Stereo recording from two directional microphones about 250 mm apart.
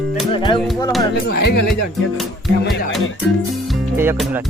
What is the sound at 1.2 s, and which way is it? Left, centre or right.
Speech, left.